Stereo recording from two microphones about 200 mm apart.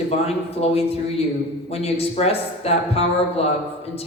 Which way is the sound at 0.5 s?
30° left (ahead or behind).